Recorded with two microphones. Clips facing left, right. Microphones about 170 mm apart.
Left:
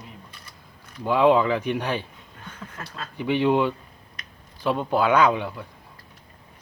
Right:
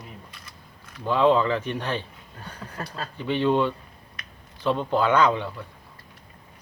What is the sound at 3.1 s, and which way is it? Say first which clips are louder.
Speech: left 2 dB; 15° left (ahead or behind).